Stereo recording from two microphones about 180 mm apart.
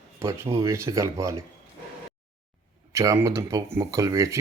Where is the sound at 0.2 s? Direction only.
15° right (ahead or behind).